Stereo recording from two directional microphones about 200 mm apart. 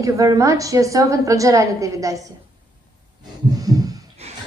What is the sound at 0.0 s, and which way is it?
A woman's voice, 15° right (ahead or behind).